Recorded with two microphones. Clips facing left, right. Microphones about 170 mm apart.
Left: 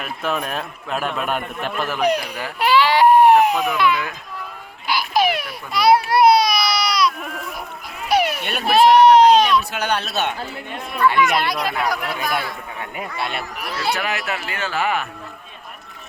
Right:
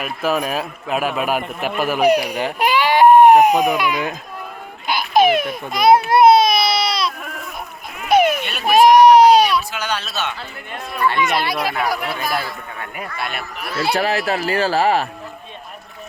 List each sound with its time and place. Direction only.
0.0 s a man's voice: 5° right (ahead or behind)
4.9 s baby cry: 20° right (ahead or behind)
8.0 s baby laughter: 20° right (ahead or behind)
8.6 s a sound: 15° right (ahead or behind)
9.7 s a man's voice: 60° left (ahead or behind)
11.3 s speech: centre (ahead or behind)
13.1 s speech: 25° left (ahead or behind)
13.6 s speech: 15° left (ahead or behind)
13.9 s speech: 35° right (ahead or behind)